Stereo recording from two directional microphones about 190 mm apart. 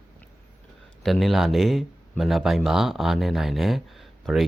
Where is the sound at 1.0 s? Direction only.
Centre (ahead or behind).